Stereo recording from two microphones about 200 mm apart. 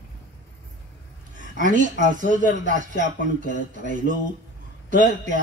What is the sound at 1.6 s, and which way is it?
Speech, 40° right (ahead or behind).